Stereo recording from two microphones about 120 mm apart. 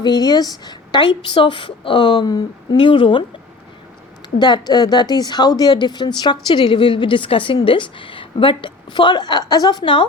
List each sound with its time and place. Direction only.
0.0 s a woman's voice: 35° left (ahead or behind)
4.4 s a woman's voice: 40° left (ahead or behind)